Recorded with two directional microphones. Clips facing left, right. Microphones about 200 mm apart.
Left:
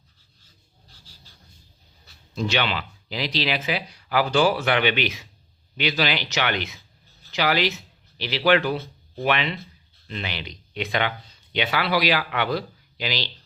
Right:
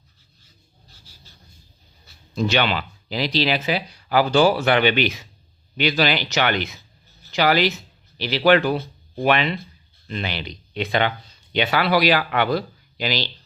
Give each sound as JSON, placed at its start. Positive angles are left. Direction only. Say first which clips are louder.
{"t": 2.3, "sound": "speech", "louder": "right 4 dB", "side_deg": -50}
{"t": 11.5, "sound": "speech", "louder": "right 4 dB", "side_deg": -45}